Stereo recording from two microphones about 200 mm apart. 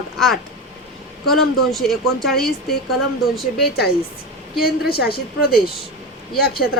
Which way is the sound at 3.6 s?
50° left (ahead or behind).